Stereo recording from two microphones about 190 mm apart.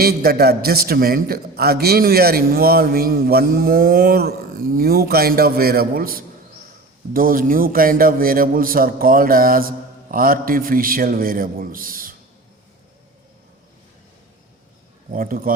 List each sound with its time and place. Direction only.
0.0 s a man's voice: 55° right (ahead or behind)
15.1 s a man's voice: 50° right (ahead or behind)